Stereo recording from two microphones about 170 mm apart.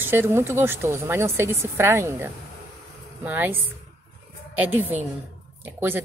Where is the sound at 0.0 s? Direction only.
15° right (ahead or behind).